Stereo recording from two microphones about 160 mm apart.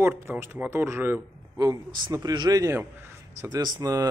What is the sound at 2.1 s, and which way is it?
A man's voice, 25° right (ahead or behind).